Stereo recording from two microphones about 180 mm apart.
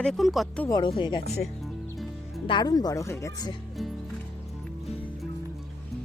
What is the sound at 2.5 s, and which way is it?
Speech, 25° left (ahead or behind).